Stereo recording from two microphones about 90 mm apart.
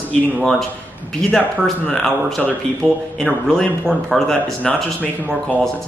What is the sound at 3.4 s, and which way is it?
A man's voice, 10° left (ahead or behind).